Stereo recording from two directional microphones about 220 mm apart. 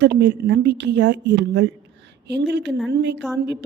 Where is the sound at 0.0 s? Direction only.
55° right (ahead or behind).